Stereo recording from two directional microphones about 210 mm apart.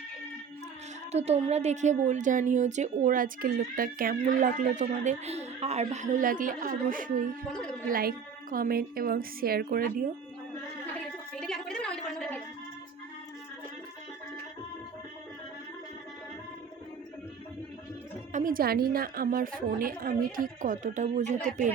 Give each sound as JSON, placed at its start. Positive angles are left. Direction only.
{"t": 1.1, "sound": "a woman's voice", "side_deg": -30}
{"t": 7.5, "sound": "speech", "side_deg": 5}
{"t": 7.9, "sound": "a woman's voice", "side_deg": -45}
{"t": 11.3, "sound": "a sound", "side_deg": 0}
{"t": 18.3, "sound": "a woman's voice", "side_deg": -40}